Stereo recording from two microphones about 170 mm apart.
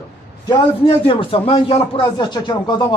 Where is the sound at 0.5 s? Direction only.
30° left (ahead or behind).